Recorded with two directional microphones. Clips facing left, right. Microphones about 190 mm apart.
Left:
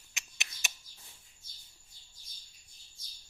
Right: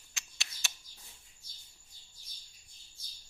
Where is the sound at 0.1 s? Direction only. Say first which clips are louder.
Left 2 dB; 20° left (ahead or behind).